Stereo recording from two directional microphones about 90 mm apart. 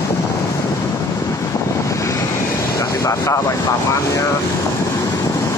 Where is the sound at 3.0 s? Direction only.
35° left (ahead or behind).